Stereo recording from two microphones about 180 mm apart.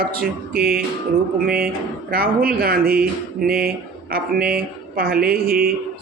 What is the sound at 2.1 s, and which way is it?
Speech, 55° right (ahead or behind).